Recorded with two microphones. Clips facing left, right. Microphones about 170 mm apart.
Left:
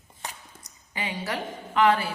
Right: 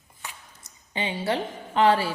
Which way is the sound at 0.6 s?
30° right (ahead or behind).